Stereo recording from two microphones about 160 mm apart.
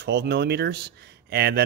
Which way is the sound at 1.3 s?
80° right.